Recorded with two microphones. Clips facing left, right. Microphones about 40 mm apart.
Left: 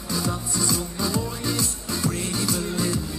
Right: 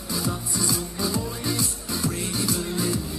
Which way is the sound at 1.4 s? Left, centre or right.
Left.